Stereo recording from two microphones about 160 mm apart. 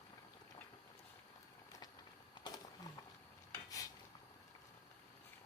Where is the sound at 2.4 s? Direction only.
25° left (ahead or behind).